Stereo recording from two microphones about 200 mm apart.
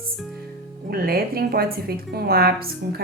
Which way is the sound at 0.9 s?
50° right (ahead or behind).